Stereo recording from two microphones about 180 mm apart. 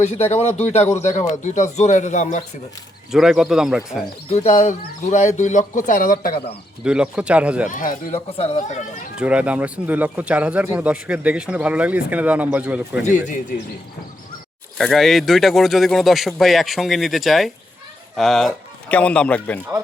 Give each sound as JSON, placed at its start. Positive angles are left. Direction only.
{"t": 0.3, "sound": "speech", "side_deg": 35}
{"t": 3.1, "sound": "a man's voice", "side_deg": -5}
{"t": 4.3, "sound": "speech", "side_deg": 40}
{"t": 6.8, "sound": "a man's voice", "side_deg": -5}
{"t": 7.7, "sound": "speech", "side_deg": 50}
{"t": 8.4, "sound": "speech", "side_deg": 40}
{"t": 9.1, "sound": "speech", "side_deg": -5}
{"t": 13.1, "sound": "speech", "side_deg": 45}
{"t": 14.8, "sound": "a man's voice", "side_deg": 0}